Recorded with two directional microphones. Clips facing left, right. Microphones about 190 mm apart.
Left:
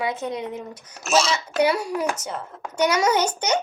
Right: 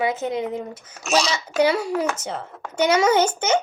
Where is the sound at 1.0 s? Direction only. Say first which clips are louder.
Left 1 dB; centre (ahead or behind).